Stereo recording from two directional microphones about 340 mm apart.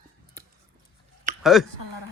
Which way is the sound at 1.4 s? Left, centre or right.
Centre.